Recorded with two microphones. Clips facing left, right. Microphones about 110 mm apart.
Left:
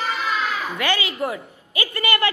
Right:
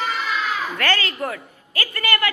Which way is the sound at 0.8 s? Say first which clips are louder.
Left 1 dB; 15° left (ahead or behind).